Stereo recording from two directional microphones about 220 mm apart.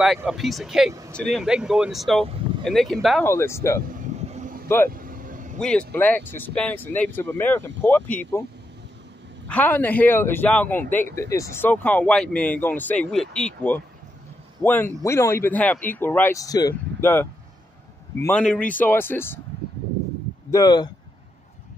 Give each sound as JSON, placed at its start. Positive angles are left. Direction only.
{"t": 0.0, "sound": "speech", "side_deg": 0}
{"t": 3.3, "sound": "speech", "side_deg": 10}
{"t": 3.8, "sound": "vehicle", "side_deg": -35}
{"t": 5.6, "sound": "speech", "side_deg": 5}
{"t": 9.5, "sound": "speech", "side_deg": 10}
{"t": 20.5, "sound": "speech", "side_deg": 20}